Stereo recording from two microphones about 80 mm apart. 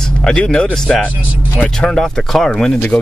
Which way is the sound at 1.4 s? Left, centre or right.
Left.